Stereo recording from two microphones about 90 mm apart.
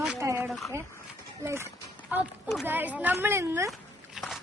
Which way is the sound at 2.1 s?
20° right (ahead or behind).